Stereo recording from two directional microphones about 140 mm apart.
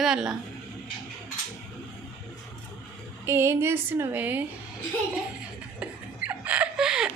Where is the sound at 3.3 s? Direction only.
15° right (ahead or behind).